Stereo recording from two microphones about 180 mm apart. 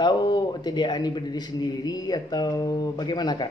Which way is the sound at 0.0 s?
25° left (ahead or behind).